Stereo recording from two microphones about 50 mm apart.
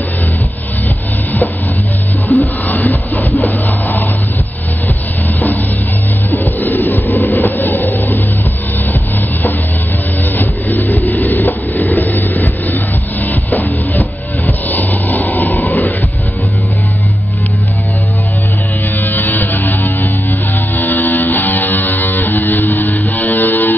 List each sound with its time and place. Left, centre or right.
2.2 s a sound: left
6.3 s music: left
10.3 s vehicle: left
18.9 s music: left